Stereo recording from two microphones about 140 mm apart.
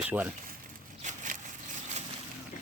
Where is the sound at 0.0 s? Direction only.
10° right (ahead or behind).